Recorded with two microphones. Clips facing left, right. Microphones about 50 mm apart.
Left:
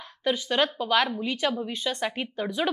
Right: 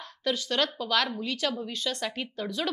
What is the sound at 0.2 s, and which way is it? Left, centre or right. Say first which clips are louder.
A woman's voice: left 3 dB; centre.